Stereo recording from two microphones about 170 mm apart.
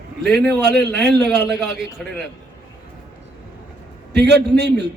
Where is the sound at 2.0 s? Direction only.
5° left (ahead or behind).